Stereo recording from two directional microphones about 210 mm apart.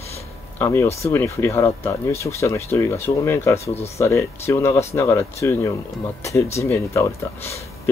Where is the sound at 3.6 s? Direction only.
30° left (ahead or behind).